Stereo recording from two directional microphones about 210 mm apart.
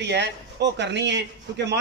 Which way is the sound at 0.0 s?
55° right (ahead or behind).